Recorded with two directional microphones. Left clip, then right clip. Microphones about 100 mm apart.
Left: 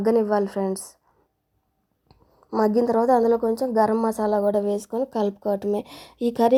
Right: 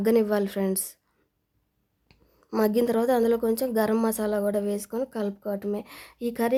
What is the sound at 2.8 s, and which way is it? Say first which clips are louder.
Speech: left 4 dB; 35° right (ahead or behind).